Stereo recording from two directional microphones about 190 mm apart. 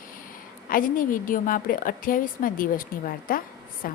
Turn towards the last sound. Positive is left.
turn(degrees=50)  # may be behind; listen again after turning